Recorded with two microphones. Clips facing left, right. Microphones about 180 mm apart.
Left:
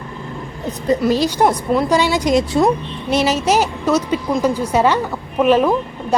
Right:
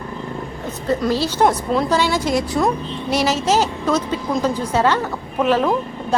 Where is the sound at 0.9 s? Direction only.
15° left (ahead or behind).